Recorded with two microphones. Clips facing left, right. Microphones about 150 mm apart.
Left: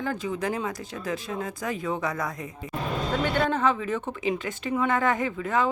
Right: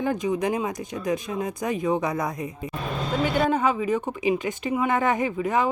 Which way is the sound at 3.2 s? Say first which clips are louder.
Right 2 dB; 10° right (ahead or behind).